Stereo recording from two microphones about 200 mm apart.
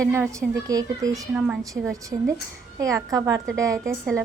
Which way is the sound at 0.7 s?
15° right (ahead or behind).